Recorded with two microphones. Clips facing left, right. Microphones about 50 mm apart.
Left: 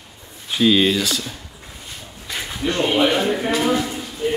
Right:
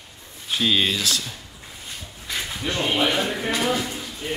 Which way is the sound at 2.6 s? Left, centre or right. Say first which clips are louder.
Left 5 dB; centre.